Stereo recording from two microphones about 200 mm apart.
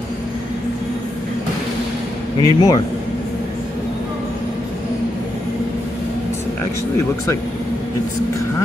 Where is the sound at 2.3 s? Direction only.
20° left (ahead or behind).